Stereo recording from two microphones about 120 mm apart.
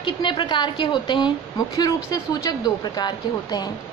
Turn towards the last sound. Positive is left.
turn(degrees=35)  # may be behind; listen again after turning